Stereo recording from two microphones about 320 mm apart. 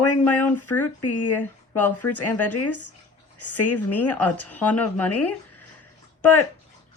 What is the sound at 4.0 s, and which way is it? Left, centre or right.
Speech, centre.